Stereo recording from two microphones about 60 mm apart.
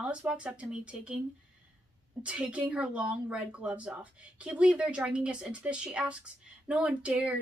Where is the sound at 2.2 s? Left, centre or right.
Right.